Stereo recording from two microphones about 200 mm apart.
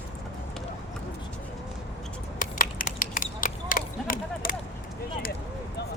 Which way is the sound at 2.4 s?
40° left (ahead or behind).